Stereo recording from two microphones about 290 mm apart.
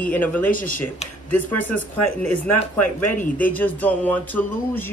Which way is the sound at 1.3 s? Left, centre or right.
Centre.